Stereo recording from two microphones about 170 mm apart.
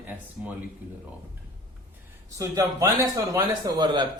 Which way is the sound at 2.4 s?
20° right (ahead or behind).